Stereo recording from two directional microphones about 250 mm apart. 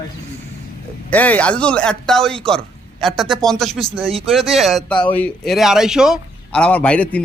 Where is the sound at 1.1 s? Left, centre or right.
Centre.